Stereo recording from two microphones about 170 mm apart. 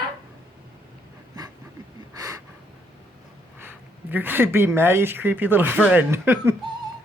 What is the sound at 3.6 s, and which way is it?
Speech, 10° right (ahead or behind).